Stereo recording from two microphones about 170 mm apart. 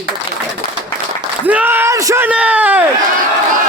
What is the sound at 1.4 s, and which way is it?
Speech, 10° right (ahead or behind).